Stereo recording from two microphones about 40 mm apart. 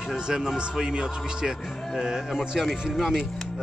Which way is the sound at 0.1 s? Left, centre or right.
Centre.